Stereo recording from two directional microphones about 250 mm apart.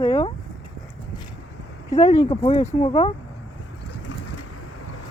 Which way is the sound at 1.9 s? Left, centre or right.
Centre.